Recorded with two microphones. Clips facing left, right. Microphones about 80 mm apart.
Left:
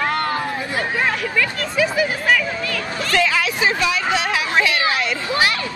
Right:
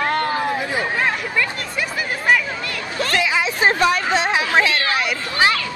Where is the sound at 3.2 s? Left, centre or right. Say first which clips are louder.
Left 2 dB; centre.